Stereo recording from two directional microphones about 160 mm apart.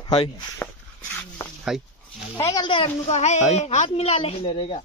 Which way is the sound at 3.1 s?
45° left (ahead or behind).